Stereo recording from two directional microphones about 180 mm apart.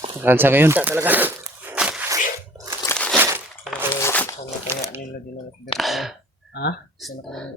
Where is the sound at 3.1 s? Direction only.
10° right (ahead or behind).